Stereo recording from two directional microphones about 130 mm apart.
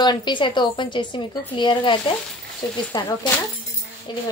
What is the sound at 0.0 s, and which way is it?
Speech, 35° left (ahead or behind).